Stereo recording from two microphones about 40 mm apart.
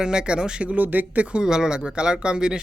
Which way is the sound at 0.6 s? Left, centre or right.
Right.